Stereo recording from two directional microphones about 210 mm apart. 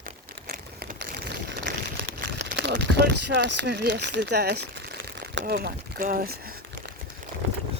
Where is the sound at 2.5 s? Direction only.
55° right (ahead or behind).